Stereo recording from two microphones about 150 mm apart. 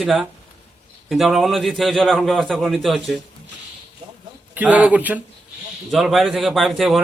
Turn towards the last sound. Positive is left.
turn(degrees=0)  # may be behind; listen again after turning